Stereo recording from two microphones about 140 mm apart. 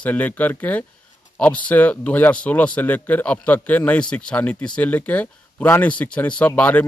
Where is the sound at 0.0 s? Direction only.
10° left (ahead or behind).